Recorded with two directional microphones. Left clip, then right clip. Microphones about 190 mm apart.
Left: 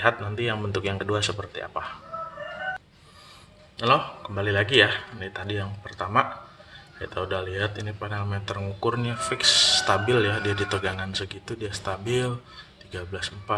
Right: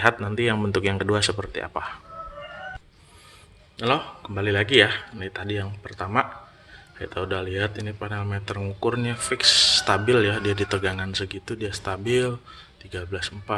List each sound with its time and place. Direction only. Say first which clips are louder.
0.0 s speech: right 3 dB; 40° right (ahead or behind)
3.8 s speech: left 2 dB; 25° right (ahead or behind)